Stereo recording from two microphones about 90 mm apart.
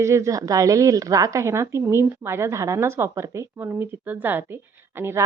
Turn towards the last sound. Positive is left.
turn(degrees=-25)  # may be behind; listen again after turning